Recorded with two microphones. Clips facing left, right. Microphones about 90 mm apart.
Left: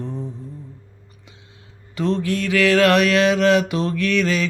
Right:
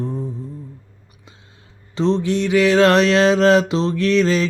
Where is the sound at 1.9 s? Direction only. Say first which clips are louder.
Right 3 dB; 20° right (ahead or behind).